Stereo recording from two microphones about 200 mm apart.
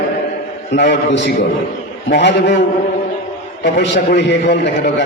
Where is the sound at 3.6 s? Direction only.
60° left (ahead or behind).